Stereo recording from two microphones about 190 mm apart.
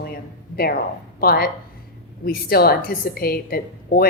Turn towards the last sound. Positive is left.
turn(degrees=50)  # may be behind; listen again after turning